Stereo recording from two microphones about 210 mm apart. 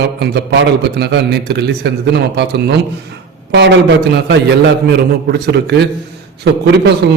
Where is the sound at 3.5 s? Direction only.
55° right (ahead or behind).